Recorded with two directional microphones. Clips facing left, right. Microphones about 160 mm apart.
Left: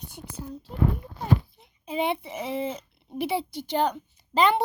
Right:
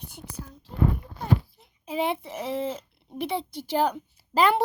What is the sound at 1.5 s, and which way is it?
A child's voice, centre (ahead or behind).